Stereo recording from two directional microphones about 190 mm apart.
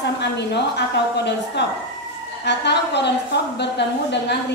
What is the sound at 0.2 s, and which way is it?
Speech, 65° left (ahead or behind).